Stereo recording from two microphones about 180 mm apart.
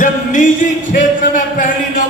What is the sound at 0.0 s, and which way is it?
Music, 45° left (ahead or behind).